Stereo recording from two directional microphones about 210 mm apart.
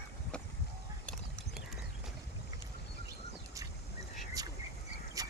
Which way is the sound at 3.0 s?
15° right (ahead or behind).